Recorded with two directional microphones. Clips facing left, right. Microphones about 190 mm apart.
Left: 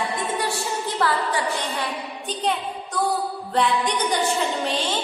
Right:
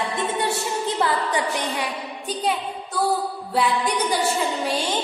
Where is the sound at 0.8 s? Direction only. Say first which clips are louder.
Even; 20° right (ahead or behind).